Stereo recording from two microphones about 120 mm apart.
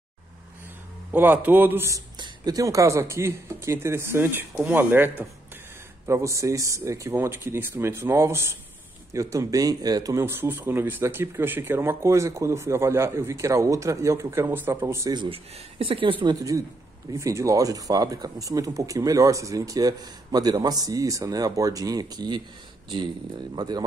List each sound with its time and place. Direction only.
1.1 s a man's voice: 15° right (ahead or behind)
1.9 s speech: 35° right (ahead or behind)
15.1 s speech: 50° right (ahead or behind)
17.1 s speech: 25° right (ahead or behind)